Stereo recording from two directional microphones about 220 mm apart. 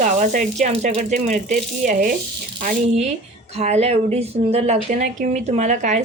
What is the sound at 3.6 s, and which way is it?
A woman's voice, 30° right (ahead or behind).